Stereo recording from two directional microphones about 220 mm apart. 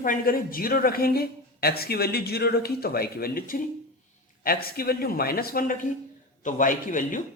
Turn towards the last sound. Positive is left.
turn(degrees=35)  # may be behind; listen again after turning